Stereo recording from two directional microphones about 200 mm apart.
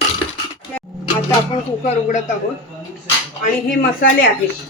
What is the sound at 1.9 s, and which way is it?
Speech, 40° left (ahead or behind).